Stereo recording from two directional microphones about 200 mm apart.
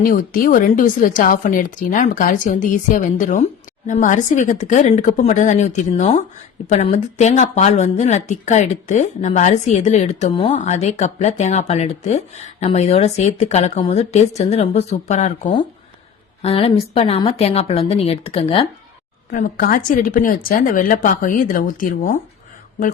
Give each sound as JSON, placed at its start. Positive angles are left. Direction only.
{"t": 0.0, "sound": "speech", "side_deg": 45}
{"t": 19.3, "sound": "speech", "side_deg": 45}